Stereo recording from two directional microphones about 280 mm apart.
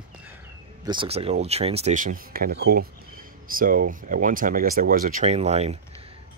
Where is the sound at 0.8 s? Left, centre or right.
Centre.